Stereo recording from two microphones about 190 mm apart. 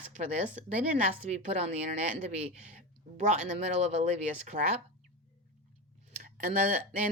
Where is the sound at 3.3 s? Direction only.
35° right (ahead or behind).